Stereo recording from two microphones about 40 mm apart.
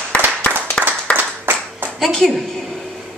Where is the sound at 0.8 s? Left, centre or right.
Centre.